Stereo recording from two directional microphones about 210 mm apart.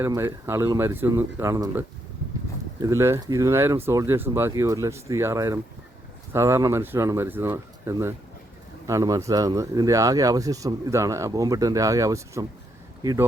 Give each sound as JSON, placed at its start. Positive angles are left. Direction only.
{"t": 0.0, "sound": "speech", "side_deg": -15}
{"t": 2.8, "sound": "speech", "side_deg": -10}